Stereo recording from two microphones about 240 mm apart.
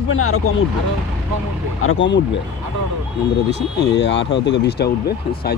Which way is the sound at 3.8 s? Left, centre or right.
Left.